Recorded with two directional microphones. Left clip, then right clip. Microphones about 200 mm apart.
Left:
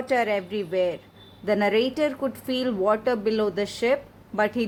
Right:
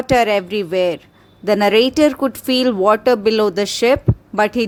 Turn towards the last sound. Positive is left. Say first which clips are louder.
# right 8 dB
turn(degrees=-30)  # may be behind; listen again after turning